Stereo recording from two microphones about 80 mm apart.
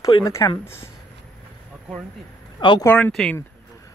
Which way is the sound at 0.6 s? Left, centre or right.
Left.